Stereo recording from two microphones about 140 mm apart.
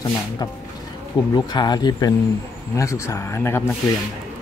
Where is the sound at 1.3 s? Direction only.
30° left (ahead or behind).